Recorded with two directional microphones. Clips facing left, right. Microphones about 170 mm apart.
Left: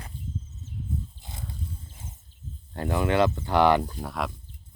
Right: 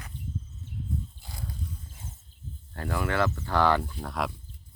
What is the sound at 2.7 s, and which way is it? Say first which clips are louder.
Speech: left 5 dB; 20° left (ahead or behind).